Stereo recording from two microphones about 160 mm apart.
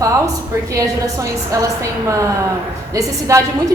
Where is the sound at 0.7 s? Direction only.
20° right (ahead or behind).